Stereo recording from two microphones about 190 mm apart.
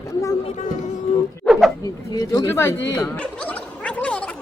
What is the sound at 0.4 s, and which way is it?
Speech, 40° left (ahead or behind).